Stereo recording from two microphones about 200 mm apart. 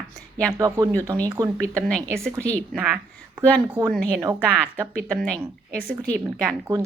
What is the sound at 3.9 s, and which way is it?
A woman's voice, 5° left (ahead or behind).